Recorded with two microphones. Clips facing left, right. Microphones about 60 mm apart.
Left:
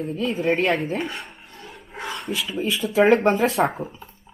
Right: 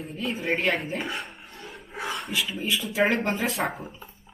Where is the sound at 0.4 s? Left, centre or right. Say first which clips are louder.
Left 5 dB; left.